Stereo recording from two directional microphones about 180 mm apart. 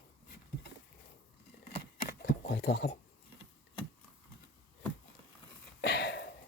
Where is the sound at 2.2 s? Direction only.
65° left (ahead or behind).